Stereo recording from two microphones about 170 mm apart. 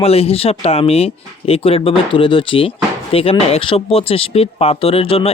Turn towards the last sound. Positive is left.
turn(degrees=35)  # may be behind; listen again after turning